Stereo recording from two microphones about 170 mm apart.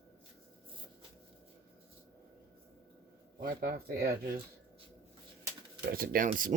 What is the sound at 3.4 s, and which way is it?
Speech, 60° right (ahead or behind).